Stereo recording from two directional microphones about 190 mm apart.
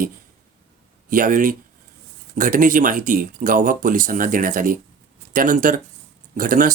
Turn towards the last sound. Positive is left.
turn(degrees=-45)  # may be behind; listen again after turning